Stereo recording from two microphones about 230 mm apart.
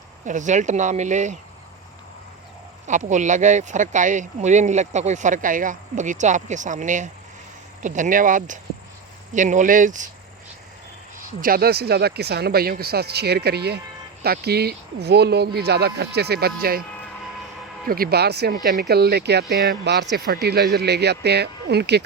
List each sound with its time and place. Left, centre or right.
0.3 s speech: right
2.8 s speech: right
11.3 s speech: right
17.8 s speech: right